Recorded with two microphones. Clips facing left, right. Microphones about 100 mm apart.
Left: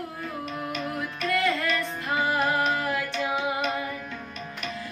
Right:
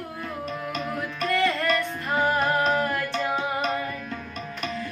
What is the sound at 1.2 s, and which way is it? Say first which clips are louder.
Music: right 2 dB; 5° left (ahead or behind).